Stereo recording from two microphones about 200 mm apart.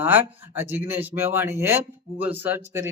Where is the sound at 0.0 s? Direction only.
10° right (ahead or behind).